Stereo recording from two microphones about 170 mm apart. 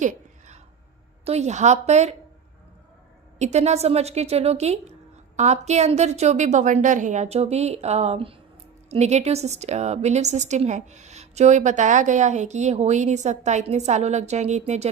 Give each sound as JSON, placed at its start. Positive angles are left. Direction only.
{"t": 0.0, "sound": "a sound", "side_deg": -45}
{"t": 1.2, "sound": "a woman's voice", "side_deg": -40}
{"t": 3.3, "sound": "a woman's voice", "side_deg": -40}